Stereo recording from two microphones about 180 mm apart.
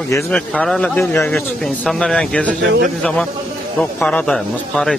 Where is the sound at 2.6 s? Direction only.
80° right.